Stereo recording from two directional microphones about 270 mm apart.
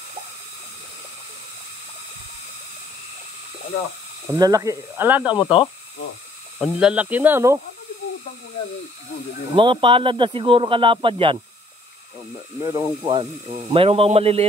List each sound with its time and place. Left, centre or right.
4.3 s speech: centre
5.4 s speech: centre
6.6 s speech: centre
9.6 s speech: centre
12.6 s speech: centre